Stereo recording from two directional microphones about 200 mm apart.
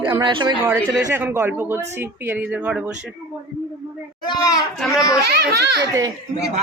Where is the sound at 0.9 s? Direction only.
10° right (ahead or behind).